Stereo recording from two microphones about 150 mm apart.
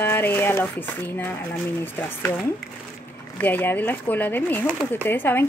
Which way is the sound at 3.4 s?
15° left (ahead or behind).